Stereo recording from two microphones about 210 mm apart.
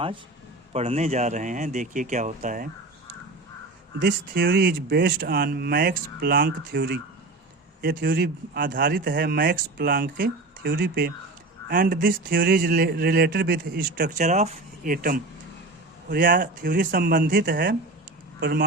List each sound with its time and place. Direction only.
0.7 s speech: 30° right (ahead or behind)
4.0 s speech: 50° right (ahead or behind)